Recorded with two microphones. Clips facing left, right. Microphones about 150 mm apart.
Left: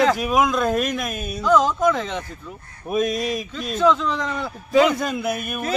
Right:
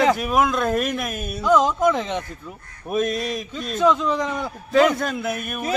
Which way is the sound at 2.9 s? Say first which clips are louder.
Left 1 dB; centre (ahead or behind).